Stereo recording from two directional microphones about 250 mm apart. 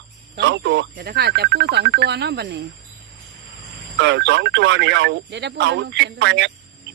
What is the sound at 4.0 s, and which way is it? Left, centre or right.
Speech, right.